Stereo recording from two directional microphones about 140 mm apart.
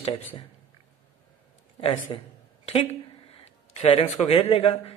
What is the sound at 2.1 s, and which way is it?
Speech, 40° left (ahead or behind).